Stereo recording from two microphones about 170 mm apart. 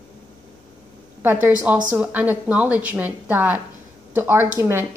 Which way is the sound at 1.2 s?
10° right (ahead or behind).